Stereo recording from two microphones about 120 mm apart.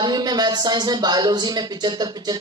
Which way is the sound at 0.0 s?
35° right (ahead or behind).